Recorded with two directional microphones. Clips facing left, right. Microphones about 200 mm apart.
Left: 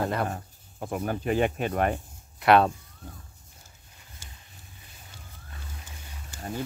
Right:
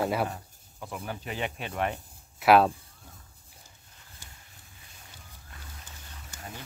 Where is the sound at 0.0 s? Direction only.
5° right (ahead or behind).